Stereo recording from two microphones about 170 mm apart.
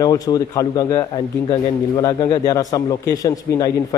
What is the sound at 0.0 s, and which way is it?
A man's voice, 20° left (ahead or behind).